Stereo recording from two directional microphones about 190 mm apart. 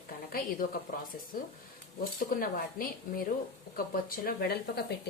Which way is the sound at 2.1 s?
50° left (ahead or behind).